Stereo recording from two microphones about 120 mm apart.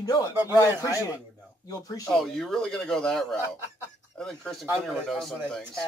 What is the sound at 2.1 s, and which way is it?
Speech, 5° left (ahead or behind).